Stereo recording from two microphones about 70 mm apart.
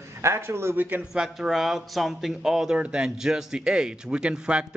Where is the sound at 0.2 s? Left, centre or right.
Right.